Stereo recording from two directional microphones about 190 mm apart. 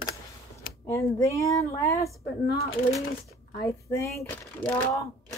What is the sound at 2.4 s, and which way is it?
Speech, 55° left (ahead or behind).